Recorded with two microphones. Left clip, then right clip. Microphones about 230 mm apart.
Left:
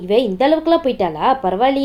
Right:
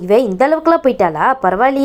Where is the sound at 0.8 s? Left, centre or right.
Right.